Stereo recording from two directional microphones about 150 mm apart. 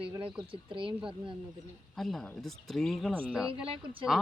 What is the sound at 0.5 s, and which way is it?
Speech, 35° right (ahead or behind).